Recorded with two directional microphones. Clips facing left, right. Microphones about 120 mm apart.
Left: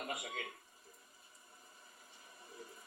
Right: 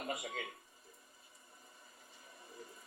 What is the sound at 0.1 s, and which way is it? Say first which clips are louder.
Speech: right 2 dB; 30° right (ahead or behind).